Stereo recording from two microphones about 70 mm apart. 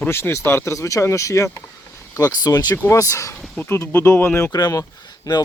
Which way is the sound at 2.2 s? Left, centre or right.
Left.